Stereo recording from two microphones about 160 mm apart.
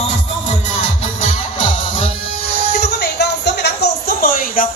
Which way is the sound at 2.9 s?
90° left.